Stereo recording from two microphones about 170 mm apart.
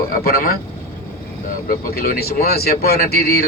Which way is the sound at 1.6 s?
60° left (ahead or behind).